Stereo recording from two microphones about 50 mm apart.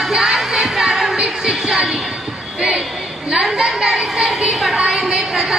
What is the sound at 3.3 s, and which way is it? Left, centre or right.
A woman's voice, centre.